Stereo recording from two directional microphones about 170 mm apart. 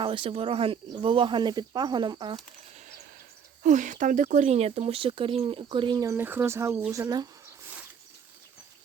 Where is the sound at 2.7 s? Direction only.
45° right (ahead or behind).